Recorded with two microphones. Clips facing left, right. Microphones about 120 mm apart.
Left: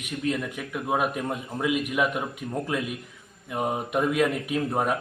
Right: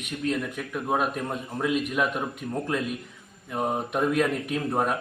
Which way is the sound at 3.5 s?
5° left (ahead or behind).